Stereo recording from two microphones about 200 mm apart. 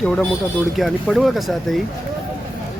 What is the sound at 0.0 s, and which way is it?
Speech, 5° left (ahead or behind).